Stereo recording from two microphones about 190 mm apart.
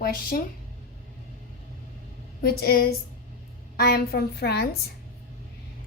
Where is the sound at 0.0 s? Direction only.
45° left (ahead or behind).